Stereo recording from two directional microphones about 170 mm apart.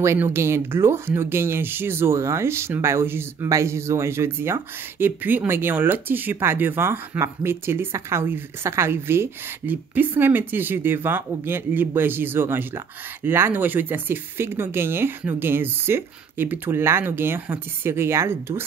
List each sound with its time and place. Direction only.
0.0 s speech: 15° right (ahead or behind)